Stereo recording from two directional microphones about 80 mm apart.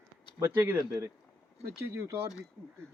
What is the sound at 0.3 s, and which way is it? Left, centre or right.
Speech, right.